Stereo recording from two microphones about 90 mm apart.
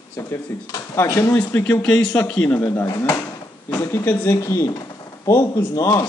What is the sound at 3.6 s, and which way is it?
Speech, 30° left (ahead or behind).